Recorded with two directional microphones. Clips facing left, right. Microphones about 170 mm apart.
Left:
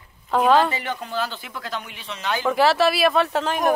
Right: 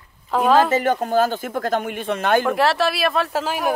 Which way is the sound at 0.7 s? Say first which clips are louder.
Right 10 dB; 45° right (ahead or behind).